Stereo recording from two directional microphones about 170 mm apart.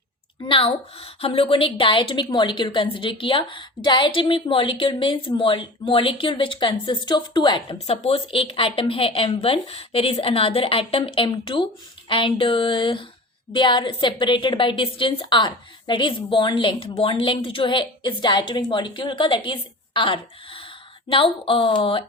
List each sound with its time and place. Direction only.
0.4 s a woman's voice: 30° left (ahead or behind)